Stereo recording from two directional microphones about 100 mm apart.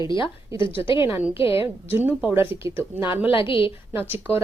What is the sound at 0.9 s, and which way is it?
Speech, 20° right (ahead or behind).